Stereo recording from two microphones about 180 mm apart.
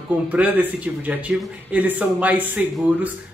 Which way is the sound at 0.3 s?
10° right (ahead or behind).